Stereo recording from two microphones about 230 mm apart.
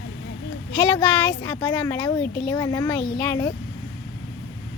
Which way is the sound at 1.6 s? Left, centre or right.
Centre.